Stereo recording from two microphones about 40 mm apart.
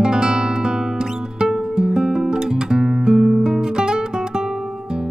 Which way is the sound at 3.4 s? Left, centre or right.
Centre.